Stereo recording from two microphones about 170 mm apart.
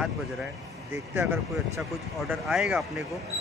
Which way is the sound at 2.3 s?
Centre (ahead or behind).